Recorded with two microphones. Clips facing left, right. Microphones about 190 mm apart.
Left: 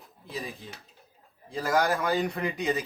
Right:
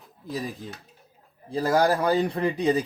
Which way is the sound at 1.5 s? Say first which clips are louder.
Right 4 dB; 35° right (ahead or behind).